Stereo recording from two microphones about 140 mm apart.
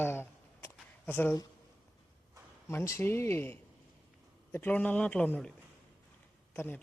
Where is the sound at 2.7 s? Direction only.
20° left (ahead or behind).